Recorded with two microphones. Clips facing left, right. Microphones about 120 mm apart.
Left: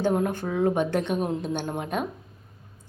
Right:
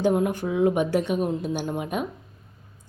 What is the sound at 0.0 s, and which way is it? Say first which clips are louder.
A woman's voice: right 2 dB; 10° right (ahead or behind).